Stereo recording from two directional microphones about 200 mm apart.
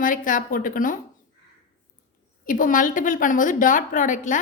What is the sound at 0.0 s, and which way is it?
Speech, 40° left (ahead or behind).